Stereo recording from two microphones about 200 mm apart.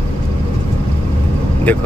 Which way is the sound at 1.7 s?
10° left (ahead or behind).